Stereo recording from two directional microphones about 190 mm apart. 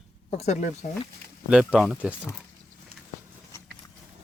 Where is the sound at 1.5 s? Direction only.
5° right (ahead or behind).